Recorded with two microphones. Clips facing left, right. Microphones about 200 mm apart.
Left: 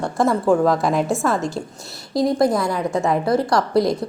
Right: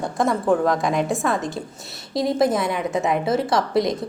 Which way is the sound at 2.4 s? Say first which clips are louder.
Left 2 dB; 20° right (ahead or behind).